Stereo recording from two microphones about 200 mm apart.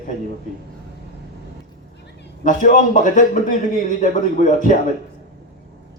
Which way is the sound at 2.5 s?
40° left (ahead or behind).